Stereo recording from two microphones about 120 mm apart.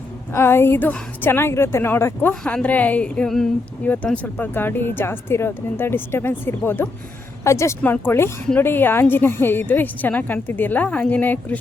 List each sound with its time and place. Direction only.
0.3 s a woman's voice: 20° left (ahead or behind)